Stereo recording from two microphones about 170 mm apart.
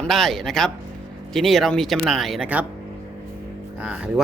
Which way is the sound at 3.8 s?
5° right (ahead or behind).